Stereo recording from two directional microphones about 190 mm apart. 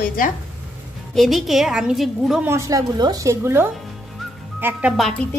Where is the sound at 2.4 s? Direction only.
15° right (ahead or behind).